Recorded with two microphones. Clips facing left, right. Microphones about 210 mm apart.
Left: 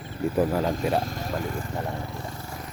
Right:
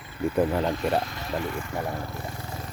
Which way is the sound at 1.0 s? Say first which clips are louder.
Left 1 dB; 45° left (ahead or behind).